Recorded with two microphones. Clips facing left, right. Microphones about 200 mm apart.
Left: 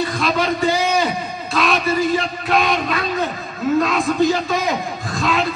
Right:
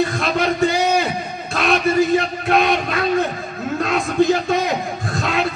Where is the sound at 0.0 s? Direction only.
50° right (ahead or behind).